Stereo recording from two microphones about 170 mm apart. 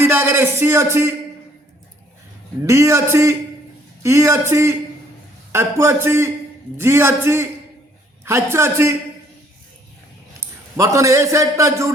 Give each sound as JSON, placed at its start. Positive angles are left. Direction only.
{"t": 0.1, "sound": "a man's voice", "side_deg": -15}
{"t": 2.6, "sound": "a man's voice", "side_deg": -15}
{"t": 10.8, "sound": "a man's voice", "side_deg": -20}